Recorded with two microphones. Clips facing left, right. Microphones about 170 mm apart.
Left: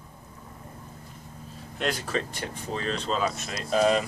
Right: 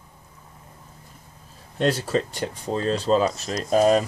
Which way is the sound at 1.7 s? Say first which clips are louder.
Right 7 dB; 35° right (ahead or behind).